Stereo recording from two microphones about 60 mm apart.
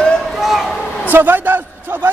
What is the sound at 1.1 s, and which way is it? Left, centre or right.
Speech, right.